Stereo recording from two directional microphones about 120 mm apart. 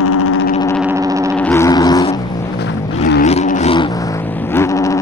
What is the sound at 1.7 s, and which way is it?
Vehicle, 30° left (ahead or behind).